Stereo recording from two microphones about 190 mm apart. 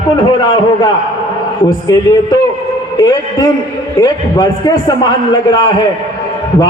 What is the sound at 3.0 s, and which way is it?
A man's voice, 20° left (ahead or behind).